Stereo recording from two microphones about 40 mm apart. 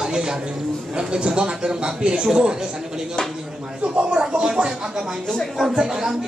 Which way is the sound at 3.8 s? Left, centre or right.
Right.